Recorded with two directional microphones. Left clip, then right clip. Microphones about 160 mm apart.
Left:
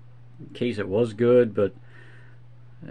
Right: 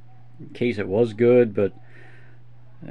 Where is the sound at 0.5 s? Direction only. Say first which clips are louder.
Right 3 dB; 30° right (ahead or behind).